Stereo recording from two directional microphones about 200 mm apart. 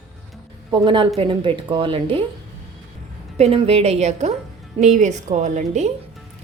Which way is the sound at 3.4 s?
30° right (ahead or behind).